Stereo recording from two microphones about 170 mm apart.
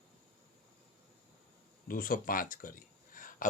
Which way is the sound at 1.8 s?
55° left (ahead or behind).